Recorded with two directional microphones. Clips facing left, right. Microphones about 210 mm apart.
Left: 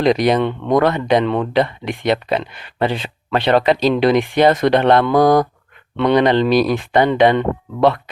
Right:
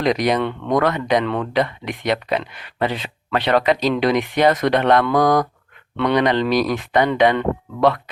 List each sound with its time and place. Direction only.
0.0 s speech: 30° left (ahead or behind)